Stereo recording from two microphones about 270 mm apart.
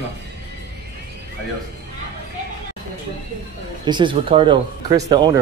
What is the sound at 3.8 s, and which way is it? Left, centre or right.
Speech, centre.